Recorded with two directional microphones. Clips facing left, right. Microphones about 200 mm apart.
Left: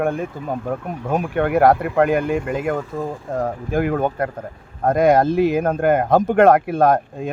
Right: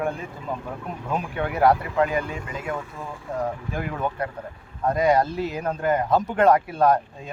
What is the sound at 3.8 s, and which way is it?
Speech, 60° left (ahead or behind).